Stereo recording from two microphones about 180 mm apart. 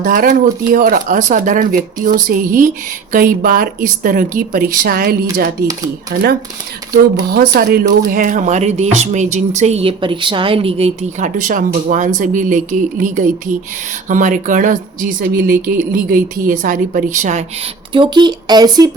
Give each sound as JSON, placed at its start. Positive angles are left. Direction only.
{"t": 0.0, "sound": "speech", "side_deg": -55}
{"t": 7.3, "sound": "speech", "side_deg": -60}
{"t": 15.2, "sound": "speech", "side_deg": -65}
{"t": 17.9, "sound": "speech", "side_deg": -25}